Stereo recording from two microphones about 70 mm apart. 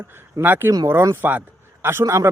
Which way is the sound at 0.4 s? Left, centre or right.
Right.